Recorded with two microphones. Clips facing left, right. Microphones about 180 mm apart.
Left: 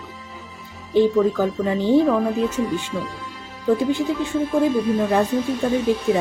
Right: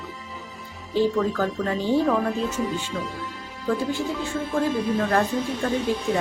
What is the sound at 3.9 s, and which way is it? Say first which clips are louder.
Speech: left 5 dB; 15° left (ahead or behind).